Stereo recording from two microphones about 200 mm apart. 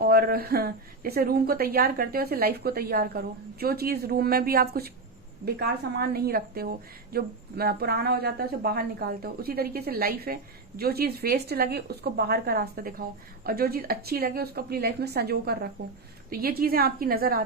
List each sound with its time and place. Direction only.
0.0 s a woman's voice: 50° right (ahead or behind)